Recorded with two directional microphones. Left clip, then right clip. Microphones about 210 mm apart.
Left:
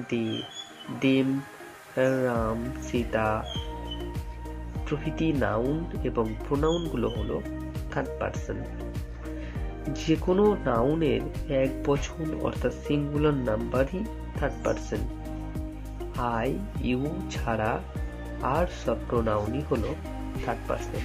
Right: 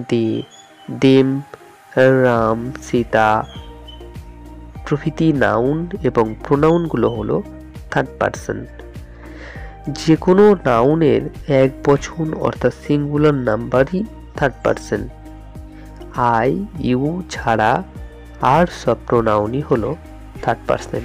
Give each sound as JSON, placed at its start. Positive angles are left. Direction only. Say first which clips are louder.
{"t": 0.0, "sound": "speech", "louder": "right 11 dB", "side_deg": -50}
{"t": 4.8, "sound": "speech", "louder": "right 11 dB", "side_deg": -50}
{"t": 9.9, "sound": "speech", "louder": "right 12 dB", "side_deg": -50}
{"t": 16.2, "sound": "speech", "louder": "right 13 dB", "side_deg": -50}